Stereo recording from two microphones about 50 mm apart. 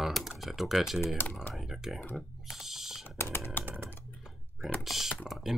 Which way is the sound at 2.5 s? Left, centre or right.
Centre.